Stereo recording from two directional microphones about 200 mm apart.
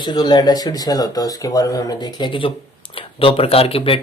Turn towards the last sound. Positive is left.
turn(degrees=25)  # may be behind; listen again after turning